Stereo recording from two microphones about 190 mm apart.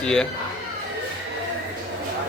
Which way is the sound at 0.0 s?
5° left (ahead or behind).